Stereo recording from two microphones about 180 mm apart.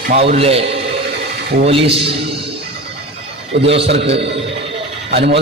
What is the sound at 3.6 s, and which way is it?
Speech, 35° right (ahead or behind).